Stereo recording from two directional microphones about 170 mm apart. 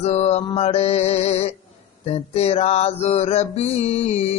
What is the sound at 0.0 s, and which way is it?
Mantra, 40° left (ahead or behind).